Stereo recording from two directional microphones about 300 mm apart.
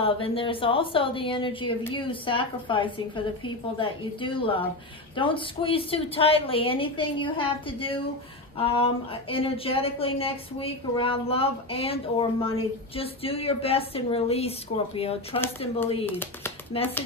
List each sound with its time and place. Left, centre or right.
0.0 s a woman's voice: centre
16.1 s a woman's voice: centre
16.7 s speech: centre